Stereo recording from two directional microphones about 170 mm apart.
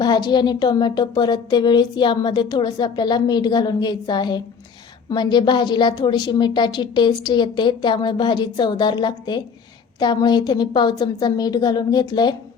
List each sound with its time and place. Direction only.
0.0 s a woman's voice: 25° left (ahead or behind)